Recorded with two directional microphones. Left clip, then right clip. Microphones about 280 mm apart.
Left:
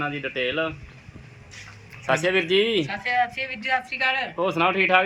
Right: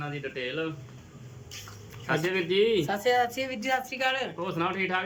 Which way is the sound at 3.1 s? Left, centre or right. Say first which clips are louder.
Left 3 dB; centre.